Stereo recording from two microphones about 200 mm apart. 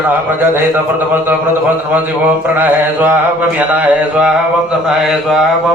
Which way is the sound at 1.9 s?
10° right (ahead or behind).